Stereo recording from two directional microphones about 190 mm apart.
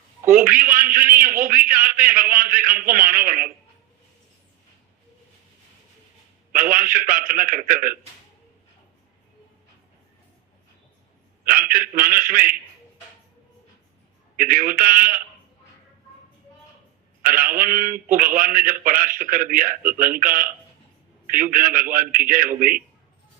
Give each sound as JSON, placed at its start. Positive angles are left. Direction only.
{"t": 0.3, "sound": "a man's voice", "side_deg": -50}
{"t": 6.5, "sound": "a man's voice", "side_deg": -50}
{"t": 11.4, "sound": "a man's voice", "side_deg": -50}
{"t": 14.3, "sound": "a man's voice", "side_deg": -45}
{"t": 17.2, "sound": "a man's voice", "side_deg": -45}